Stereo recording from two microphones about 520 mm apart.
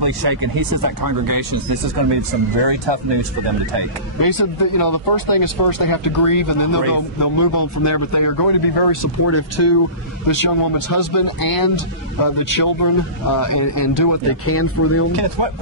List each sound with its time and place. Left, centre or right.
0.0 s speech: right
4.2 s speech: left